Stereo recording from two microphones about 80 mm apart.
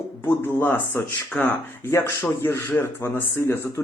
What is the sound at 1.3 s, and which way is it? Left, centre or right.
Speech, centre.